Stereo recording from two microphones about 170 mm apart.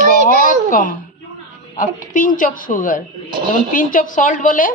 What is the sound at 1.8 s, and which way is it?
A man's voice, 50° left (ahead or behind).